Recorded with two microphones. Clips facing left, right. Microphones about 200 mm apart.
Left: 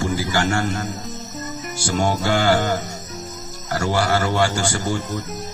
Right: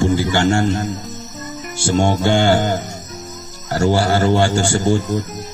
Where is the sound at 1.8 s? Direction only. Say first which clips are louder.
Right 5 dB; 25° right (ahead or behind).